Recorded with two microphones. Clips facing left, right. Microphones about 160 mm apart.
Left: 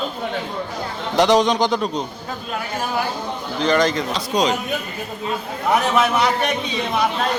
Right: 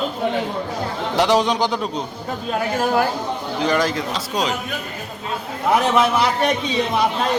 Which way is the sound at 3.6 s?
5° right (ahead or behind).